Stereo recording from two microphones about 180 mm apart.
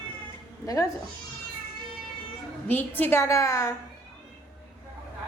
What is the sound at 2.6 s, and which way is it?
A woman's voice, 10° left (ahead or behind).